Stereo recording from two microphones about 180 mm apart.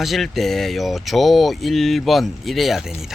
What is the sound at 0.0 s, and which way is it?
Speech, centre (ahead or behind).